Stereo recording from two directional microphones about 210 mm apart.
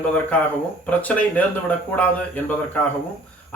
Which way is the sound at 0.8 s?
5° left (ahead or behind).